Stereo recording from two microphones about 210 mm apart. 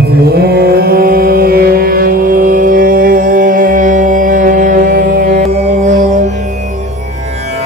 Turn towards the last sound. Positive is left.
turn(degrees=-35)  # may be behind; listen again after turning